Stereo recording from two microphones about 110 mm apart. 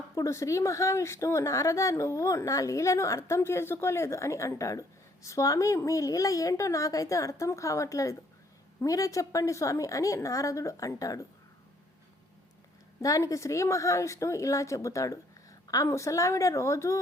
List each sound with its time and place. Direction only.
0.2 s a woman's voice: 25° left (ahead or behind)
13.0 s a woman's voice: 30° left (ahead or behind)